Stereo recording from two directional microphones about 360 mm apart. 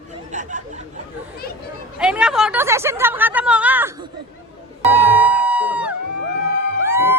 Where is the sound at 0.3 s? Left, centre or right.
Centre.